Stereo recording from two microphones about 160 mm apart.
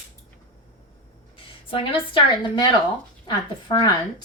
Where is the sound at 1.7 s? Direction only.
35° left (ahead or behind).